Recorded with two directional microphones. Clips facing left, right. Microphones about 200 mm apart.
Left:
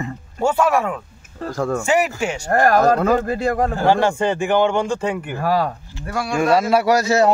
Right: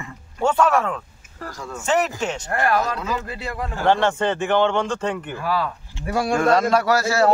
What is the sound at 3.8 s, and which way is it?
Speech, 10° left (ahead or behind).